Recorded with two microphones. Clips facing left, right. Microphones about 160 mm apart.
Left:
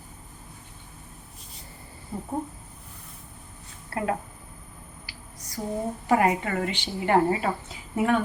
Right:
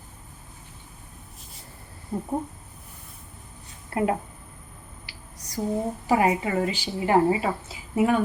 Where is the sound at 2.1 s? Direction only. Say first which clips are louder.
Right 5 dB; 5° right (ahead or behind).